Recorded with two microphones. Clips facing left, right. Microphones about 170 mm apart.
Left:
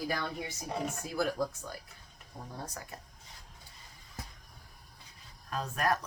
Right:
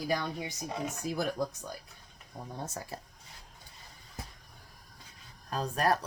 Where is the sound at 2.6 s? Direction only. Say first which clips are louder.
Right 6 dB; 30° right (ahead or behind).